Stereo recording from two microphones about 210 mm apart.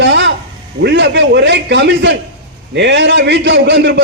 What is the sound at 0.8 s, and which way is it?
A man's voice, 55° right (ahead or behind).